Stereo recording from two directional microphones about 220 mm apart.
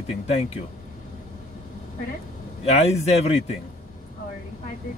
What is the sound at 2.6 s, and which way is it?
Speech, 30° left (ahead or behind).